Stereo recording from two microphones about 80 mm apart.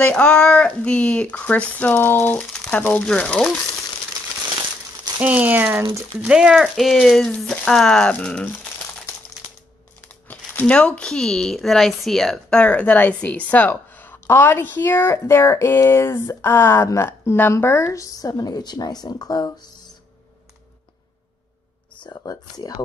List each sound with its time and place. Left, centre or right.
0.0 s speech: centre
2.3 s speech: centre
5.2 s speech: centre
6.2 s speech: centre
10.0 s speech: left
22.1 s speech: left